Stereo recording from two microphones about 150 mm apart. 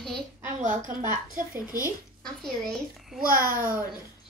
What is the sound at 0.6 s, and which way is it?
A woman's voice, 55° right (ahead or behind).